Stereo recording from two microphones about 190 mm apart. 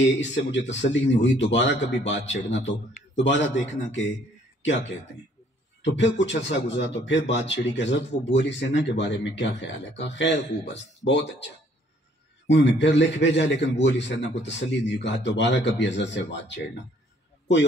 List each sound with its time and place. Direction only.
0.0 s speech: 75° left (ahead or behind)
5.8 s speech: 70° left (ahead or behind)